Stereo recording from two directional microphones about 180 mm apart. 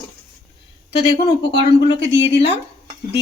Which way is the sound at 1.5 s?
25° left (ahead or behind).